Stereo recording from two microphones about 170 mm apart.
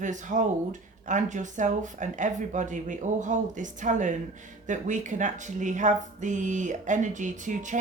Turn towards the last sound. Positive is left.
turn(degrees=-45)  # may be behind; listen again after turning